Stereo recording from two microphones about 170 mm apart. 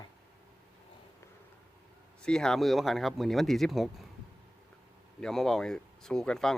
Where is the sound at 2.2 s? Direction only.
5° left (ahead or behind).